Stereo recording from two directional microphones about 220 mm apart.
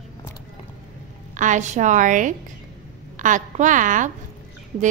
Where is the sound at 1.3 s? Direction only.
35° right (ahead or behind).